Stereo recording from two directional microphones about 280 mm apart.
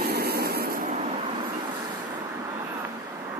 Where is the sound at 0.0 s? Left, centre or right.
Right.